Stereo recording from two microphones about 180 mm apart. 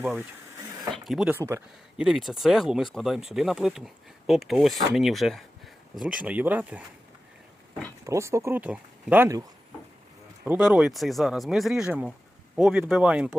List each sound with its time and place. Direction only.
0.0 s speech: 5° right (ahead or behind)
1.4 s speech: 15° right (ahead or behind)
2.0 s speech: centre (ahead or behind)
8.0 s speech: 15° right (ahead or behind)